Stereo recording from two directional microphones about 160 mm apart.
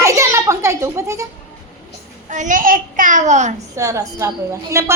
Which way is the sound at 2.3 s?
55° right (ahead or behind).